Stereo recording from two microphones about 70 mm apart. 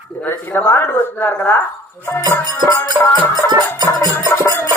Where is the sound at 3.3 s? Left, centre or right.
Right.